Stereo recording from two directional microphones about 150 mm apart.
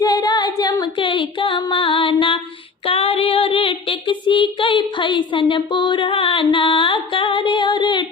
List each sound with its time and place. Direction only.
0.0 s singing: 25° left (ahead or behind)
2.8 s child singing: 40° left (ahead or behind)